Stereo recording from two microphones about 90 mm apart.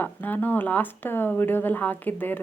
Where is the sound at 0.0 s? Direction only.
20° left (ahead or behind).